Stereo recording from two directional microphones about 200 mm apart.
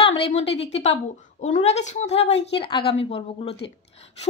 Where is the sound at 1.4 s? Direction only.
35° left (ahead or behind).